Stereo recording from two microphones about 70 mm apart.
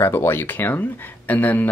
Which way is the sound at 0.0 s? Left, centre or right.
Left.